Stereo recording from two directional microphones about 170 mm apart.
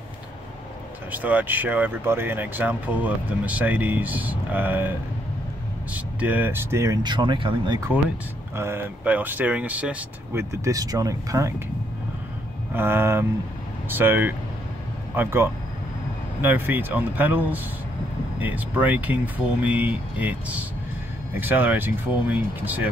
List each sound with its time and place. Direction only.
1.1 s speech: 10° right (ahead or behind)
5.9 s speech: 10° right (ahead or behind); by 7.8 s 30° right (ahead or behind)
8.5 s speech: 15° right (ahead or behind)
12.7 s speech: 15° right (ahead or behind)